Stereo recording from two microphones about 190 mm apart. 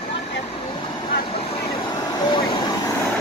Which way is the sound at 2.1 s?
25° left (ahead or behind).